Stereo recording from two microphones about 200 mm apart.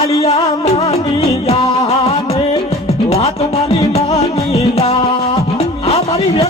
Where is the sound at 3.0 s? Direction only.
30° left (ahead or behind).